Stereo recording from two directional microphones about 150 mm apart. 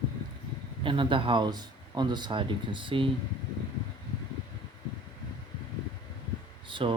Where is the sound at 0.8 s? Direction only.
35° right (ahead or behind).